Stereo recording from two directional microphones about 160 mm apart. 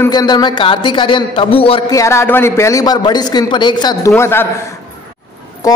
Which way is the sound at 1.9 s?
20° left (ahead or behind).